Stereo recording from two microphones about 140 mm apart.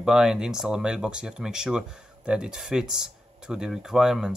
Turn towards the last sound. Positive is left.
turn(degrees=-5)  # may be behind; listen again after turning